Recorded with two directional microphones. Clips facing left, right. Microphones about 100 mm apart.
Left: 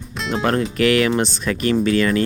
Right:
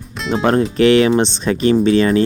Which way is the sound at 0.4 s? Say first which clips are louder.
Right 5 dB; 25° right (ahead or behind).